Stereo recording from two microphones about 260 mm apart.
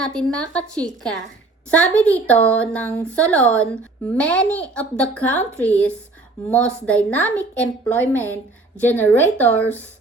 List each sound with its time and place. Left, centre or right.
0.0 s a woman's voice: centre